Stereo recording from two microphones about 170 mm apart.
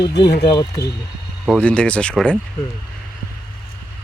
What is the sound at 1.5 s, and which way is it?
Speech, 5° left (ahead or behind).